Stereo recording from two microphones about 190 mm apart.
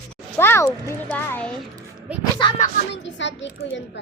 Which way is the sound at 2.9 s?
70° left (ahead or behind).